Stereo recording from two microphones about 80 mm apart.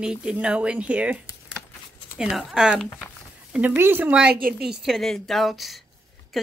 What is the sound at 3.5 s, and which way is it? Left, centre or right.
Speech, right.